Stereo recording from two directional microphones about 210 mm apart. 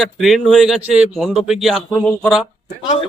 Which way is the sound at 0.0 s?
Centre (ahead or behind).